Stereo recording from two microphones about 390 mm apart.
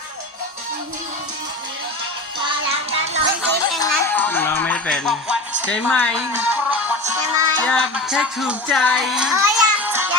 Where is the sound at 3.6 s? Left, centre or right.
Centre.